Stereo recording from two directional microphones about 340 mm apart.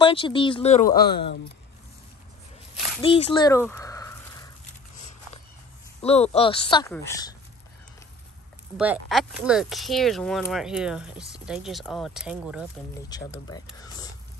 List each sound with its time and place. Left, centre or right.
0.0 s speech: centre
3.0 s a sound: centre
4.9 s walk: left
6.0 s speech: centre
8.7 s speech: centre
13.5 s speech: centre